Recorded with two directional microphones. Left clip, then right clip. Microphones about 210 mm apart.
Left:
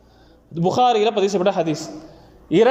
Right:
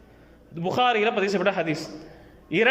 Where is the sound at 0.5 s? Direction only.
15° left (ahead or behind).